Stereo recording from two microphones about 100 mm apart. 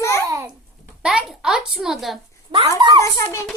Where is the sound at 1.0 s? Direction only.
5° right (ahead or behind).